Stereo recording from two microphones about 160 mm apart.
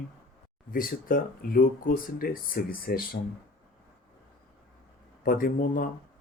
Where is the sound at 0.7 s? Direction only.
60° left (ahead or behind).